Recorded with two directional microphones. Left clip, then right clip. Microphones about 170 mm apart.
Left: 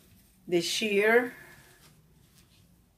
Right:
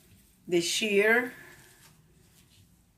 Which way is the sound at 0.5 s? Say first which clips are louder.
Right 1 dB; 15° left (ahead or behind).